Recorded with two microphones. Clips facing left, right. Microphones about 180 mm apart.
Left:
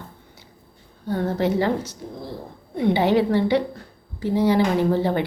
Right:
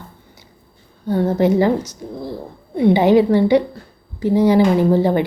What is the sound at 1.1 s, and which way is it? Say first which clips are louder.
A woman's voice: right 6 dB; 10° right (ahead or behind).